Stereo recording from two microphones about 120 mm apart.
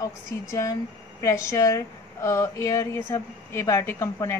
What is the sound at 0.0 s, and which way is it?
Speech, 30° left (ahead or behind).